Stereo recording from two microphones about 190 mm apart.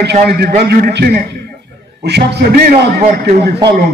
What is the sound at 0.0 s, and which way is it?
A man's voice, 55° right (ahead or behind).